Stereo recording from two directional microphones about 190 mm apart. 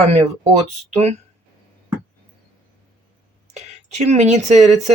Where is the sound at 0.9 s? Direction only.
35° right (ahead or behind).